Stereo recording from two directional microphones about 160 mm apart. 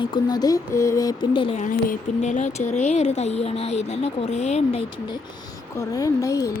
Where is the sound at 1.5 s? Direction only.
55° left (ahead or behind); by 4.9 s 40° left (ahead or behind).